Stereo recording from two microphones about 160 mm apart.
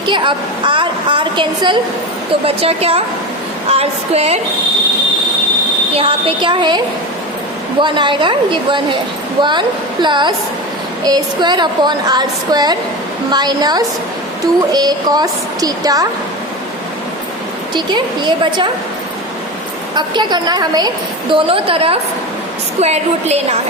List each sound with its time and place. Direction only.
0.0 s a woman's voice: 30° right (ahead or behind)
5.9 s a woman's voice: 35° right (ahead or behind)
17.7 s a woman's voice: 30° right (ahead or behind)
20.0 s a woman's voice: 25° right (ahead or behind)